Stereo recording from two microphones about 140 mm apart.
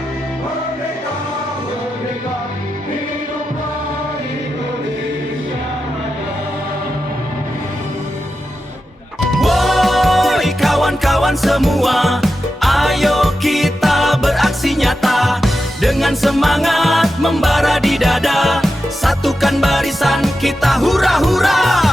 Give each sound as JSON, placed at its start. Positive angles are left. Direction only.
{"t": 9.4, "sound": "music", "side_deg": 0}